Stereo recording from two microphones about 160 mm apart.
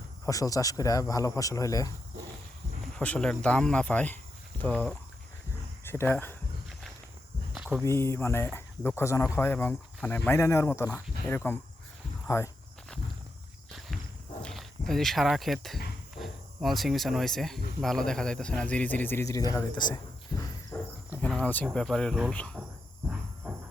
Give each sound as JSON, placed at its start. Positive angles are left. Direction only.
{"t": 0.3, "sound": "speech", "side_deg": 20}
{"t": 2.9, "sound": "speech", "side_deg": 5}
{"t": 7.5, "sound": "walk", "side_deg": -5}
{"t": 7.9, "sound": "speech", "side_deg": 15}
{"t": 13.7, "sound": "walk", "side_deg": 0}
{"t": 14.4, "sound": "speech", "side_deg": 0}
{"t": 20.7, "sound": "cricket", "side_deg": 10}
{"t": 21.2, "sound": "speech", "side_deg": 10}
{"t": 23.0, "sound": "a sound", "side_deg": -5}